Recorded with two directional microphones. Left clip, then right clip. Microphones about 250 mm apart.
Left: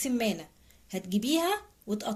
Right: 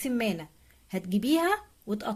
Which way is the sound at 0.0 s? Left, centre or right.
Right.